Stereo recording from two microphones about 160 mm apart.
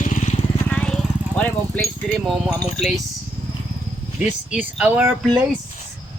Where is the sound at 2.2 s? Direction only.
5° right (ahead or behind).